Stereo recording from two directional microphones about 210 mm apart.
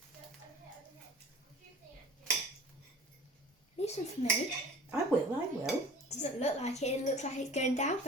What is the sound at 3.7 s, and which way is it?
Finger snapping, 30° left (ahead or behind).